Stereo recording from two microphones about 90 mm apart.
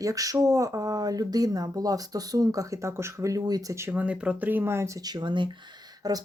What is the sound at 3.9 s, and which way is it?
Speech, 15° right (ahead or behind).